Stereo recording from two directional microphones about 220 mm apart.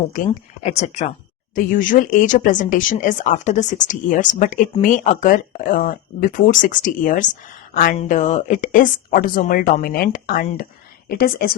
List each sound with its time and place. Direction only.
0.3 s a woman's voice: 30° left (ahead or behind)